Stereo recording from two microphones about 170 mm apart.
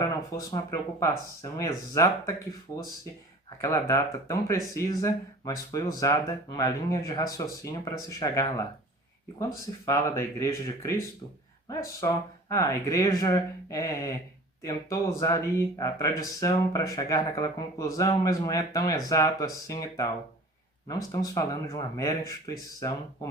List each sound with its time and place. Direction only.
0.0 s speech: 20° left (ahead or behind)
3.6 s speech: 20° left (ahead or behind)